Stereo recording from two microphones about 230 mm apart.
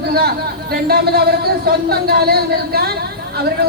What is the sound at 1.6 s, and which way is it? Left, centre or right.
Speech, right.